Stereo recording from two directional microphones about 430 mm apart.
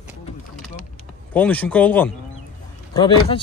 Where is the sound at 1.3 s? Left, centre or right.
Centre.